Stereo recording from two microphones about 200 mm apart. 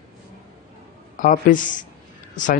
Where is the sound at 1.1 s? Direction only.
40° left (ahead or behind).